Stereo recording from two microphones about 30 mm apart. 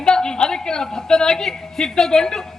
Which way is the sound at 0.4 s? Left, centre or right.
Left.